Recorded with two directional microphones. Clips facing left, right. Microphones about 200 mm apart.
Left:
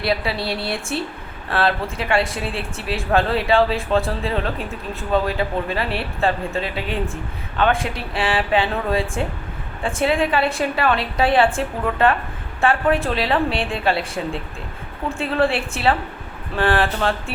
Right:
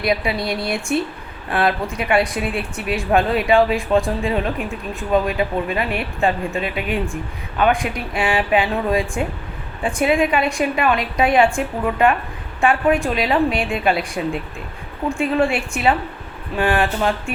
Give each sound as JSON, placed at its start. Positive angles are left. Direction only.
{"t": 0.0, "sound": "a woman's voice", "side_deg": -15}
{"t": 15.5, "sound": "a woman's voice", "side_deg": -15}